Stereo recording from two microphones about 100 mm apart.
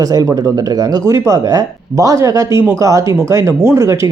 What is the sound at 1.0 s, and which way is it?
Speech, 35° right (ahead or behind).